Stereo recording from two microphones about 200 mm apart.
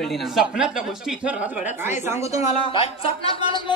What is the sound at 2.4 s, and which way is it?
Speech, 25° left (ahead or behind).